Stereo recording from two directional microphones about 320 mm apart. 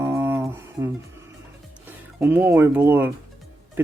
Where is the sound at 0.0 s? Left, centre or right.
Centre.